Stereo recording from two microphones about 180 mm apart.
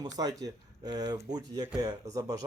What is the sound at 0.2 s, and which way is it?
Speech, 20° right (ahead or behind).